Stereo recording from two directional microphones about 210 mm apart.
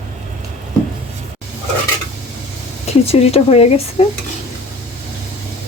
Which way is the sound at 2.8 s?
30° left (ahead or behind).